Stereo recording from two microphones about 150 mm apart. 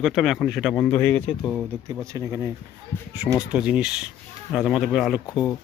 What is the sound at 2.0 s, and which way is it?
Speech, 20° right (ahead or behind).